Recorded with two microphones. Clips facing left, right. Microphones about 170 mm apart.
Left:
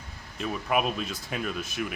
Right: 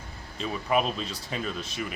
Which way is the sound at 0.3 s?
5° left (ahead or behind).